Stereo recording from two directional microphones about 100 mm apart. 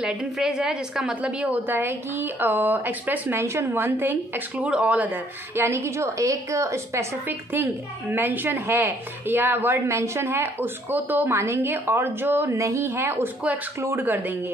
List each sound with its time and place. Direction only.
0.0 s a woman's voice: 5° right (ahead or behind)